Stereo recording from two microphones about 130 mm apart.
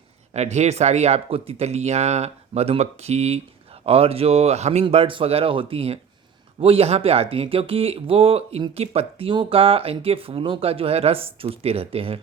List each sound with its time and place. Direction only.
0.3 s speech: 60° right (ahead or behind)